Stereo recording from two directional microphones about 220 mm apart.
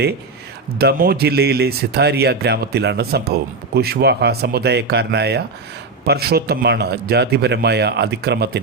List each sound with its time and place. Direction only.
0.8 s speech: 45° right (ahead or behind)